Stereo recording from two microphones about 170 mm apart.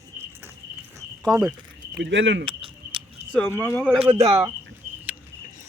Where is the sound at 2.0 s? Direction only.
90° right.